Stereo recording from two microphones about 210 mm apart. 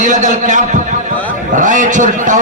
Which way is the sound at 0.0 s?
35° right (ahead or behind).